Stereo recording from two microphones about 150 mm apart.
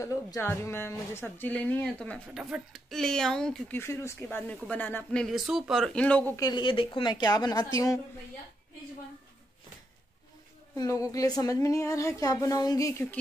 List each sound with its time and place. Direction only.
0.0 s a woman's voice: 20° left (ahead or behind); by 3.7 s 5° left (ahead or behind)
3.7 s a woman's voice: 15° left (ahead or behind)
6.3 s a woman's voice: 30° left (ahead or behind)
10.8 s a woman's voice: 20° left (ahead or behind)